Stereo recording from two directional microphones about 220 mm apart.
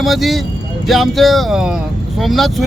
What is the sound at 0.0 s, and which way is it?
A man's voice, centre (ahead or behind).